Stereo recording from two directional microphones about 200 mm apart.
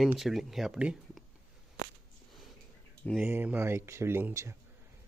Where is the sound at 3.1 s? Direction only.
10° right (ahead or behind).